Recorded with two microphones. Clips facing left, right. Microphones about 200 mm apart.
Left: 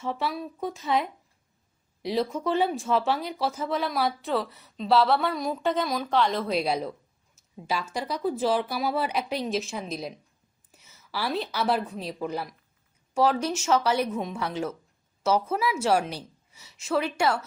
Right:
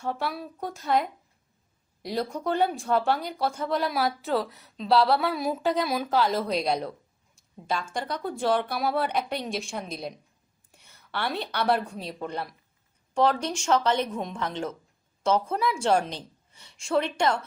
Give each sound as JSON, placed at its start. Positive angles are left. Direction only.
{"t": 0.0, "sound": "a woman's voice", "side_deg": 0}